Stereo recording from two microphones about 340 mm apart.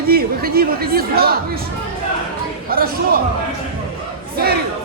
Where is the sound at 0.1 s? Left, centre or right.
Right.